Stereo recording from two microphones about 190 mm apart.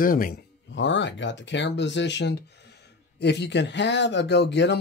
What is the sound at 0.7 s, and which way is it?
Speech, 70° left (ahead or behind).